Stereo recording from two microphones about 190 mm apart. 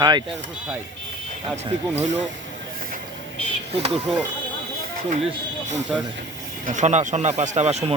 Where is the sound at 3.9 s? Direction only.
5° right (ahead or behind).